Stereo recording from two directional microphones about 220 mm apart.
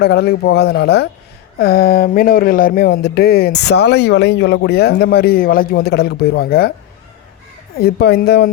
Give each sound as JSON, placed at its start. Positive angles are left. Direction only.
{"t": 0.0, "sound": "speech", "side_deg": 45}
{"t": 7.8, "sound": "speech", "side_deg": 45}